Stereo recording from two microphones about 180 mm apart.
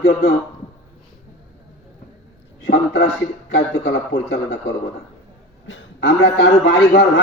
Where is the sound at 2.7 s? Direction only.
70° left (ahead or behind).